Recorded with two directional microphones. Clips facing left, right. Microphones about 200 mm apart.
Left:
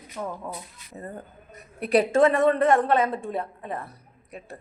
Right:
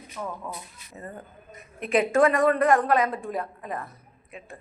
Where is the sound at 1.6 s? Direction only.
40° left (ahead or behind).